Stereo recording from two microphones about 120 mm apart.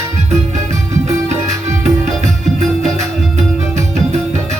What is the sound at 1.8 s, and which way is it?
Music, 80° right.